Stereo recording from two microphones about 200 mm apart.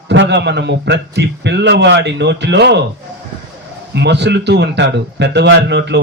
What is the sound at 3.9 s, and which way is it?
A man's voice, 60° right (ahead or behind).